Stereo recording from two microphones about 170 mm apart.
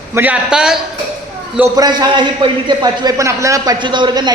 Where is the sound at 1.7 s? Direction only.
25° right (ahead or behind).